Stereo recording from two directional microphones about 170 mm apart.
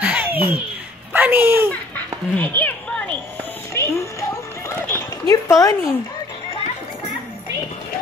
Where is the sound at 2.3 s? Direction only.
10° left (ahead or behind).